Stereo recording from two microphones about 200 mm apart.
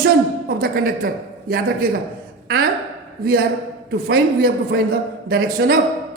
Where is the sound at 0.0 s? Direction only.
50° right (ahead or behind).